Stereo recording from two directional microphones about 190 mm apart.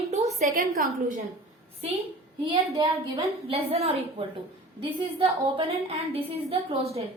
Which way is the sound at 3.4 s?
30° right (ahead or behind).